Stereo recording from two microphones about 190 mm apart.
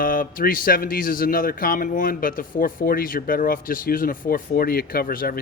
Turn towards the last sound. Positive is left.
turn(degrees=50)  # may be behind; listen again after turning